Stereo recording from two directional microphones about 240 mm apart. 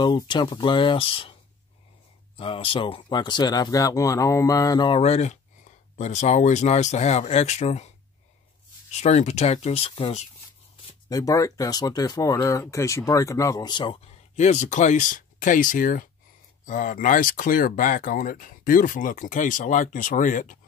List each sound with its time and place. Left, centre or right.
0.0 s speech: centre
2.3 s speech: left
8.9 s speech: left
11.1 s speech: centre; by 20.5 s left